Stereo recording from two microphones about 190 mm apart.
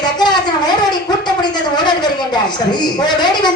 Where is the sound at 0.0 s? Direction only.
20° left (ahead or behind).